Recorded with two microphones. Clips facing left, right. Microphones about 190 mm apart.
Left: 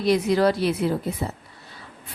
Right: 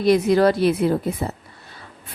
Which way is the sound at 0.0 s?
50° right (ahead or behind).